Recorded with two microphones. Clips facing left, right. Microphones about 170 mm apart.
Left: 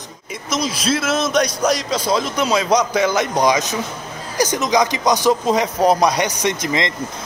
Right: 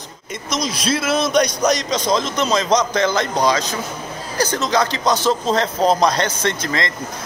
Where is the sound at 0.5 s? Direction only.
5° left (ahead or behind).